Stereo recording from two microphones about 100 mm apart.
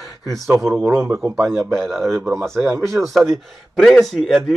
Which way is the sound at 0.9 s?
30° right (ahead or behind).